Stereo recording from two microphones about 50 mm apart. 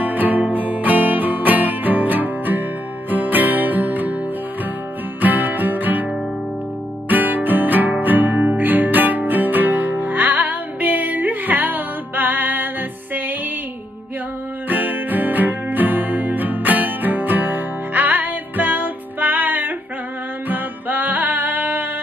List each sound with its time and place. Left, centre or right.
0.0 s music: right
5.2 s music: right
7.1 s music: right
14.7 s music: right